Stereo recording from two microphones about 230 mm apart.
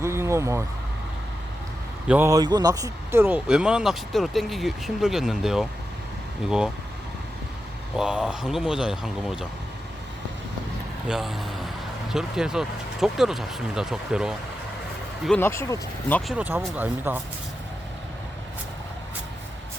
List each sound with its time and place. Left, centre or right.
0.0 s vehicle: centre
2.0 s speech: centre
7.9 s speech: centre
11.1 s speech: centre
16.3 s speech: centre